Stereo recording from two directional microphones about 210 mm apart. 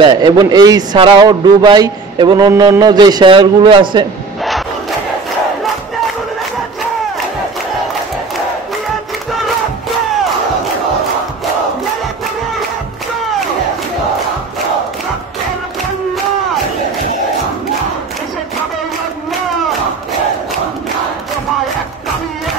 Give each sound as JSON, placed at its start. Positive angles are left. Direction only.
{"t": 0.0, "sound": "a man's voice", "side_deg": -20}